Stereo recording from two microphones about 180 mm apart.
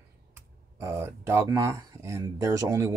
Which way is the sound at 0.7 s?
15° right (ahead or behind).